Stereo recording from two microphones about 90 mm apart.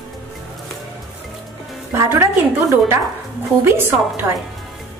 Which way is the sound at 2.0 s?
30° right (ahead or behind).